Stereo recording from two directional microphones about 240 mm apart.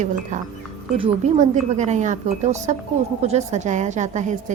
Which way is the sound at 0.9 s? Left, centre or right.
Right.